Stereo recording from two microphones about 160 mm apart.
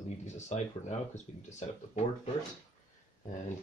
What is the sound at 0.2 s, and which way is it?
Speech, 45° left (ahead or behind).